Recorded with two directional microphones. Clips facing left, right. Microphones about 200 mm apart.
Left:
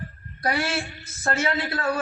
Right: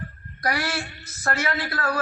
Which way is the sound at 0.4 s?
25° left (ahead or behind).